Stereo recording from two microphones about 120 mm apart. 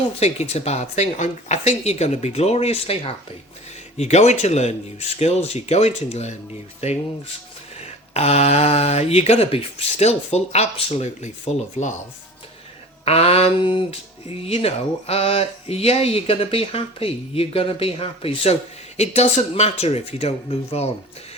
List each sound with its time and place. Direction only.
0.2 s speech: 60° left (ahead or behind)
3.9 s speech: 70° left (ahead or behind)
7.8 s speech: 60° left (ahead or behind); by 11.9 s 85° left
13.1 s speech: 60° left (ahead or behind)
18.9 s speech: 65° left (ahead or behind)